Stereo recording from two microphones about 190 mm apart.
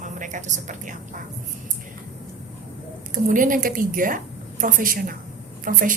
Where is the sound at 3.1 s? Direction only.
45° right (ahead or behind).